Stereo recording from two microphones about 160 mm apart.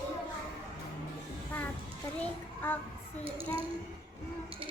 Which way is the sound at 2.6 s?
10° left (ahead or behind).